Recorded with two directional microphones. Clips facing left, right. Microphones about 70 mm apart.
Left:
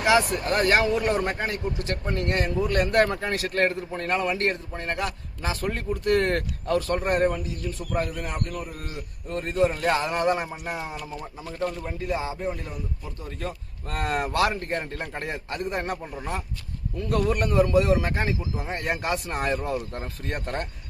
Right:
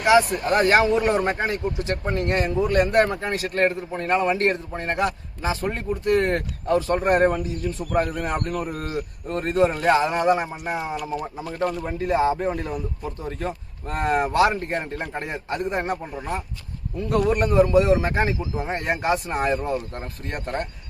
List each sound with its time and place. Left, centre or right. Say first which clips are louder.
0.0 s speech: right 4 dB; centre
0.4 s speech: right 4 dB; right
5.9 s speech: right 2 dB; centre; by 8.4 s right
8.4 s a man's voice: right 5 dB; right
10.0 s a man's voice: right 4 dB; centre
11.9 s a man's voice: right 8 dB; right
13.0 s a man's voice: right 5 dB; right
13.8 s a man's voice: right 5 dB; right
17.3 s a man's voice: right 4 dB; right
19.1 s a man's voice: right 4 dB; centre
19.5 s speech: right 2 dB; centre